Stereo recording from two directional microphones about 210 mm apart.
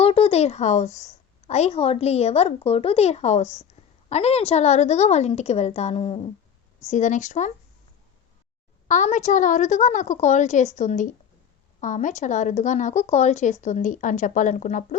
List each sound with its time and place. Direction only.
0.0 s a woman's voice: 30° left (ahead or behind)
8.9 s speech: 35° left (ahead or behind)